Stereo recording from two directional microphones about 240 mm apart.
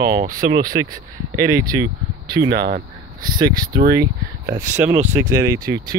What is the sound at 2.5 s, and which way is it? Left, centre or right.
Speech, right.